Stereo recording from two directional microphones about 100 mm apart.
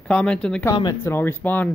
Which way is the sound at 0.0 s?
10° left (ahead or behind).